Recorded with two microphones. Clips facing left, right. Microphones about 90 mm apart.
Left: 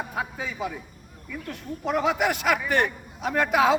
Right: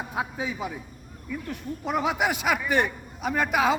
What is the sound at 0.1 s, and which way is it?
A man's voice, 15° right (ahead or behind).